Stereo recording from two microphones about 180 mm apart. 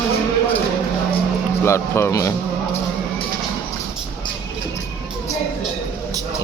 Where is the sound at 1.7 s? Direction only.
15° left (ahead or behind).